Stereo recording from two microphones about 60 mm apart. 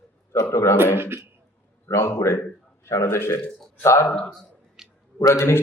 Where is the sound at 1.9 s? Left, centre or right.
Left.